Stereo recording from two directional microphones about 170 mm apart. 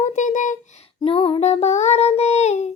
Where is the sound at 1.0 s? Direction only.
35° left (ahead or behind).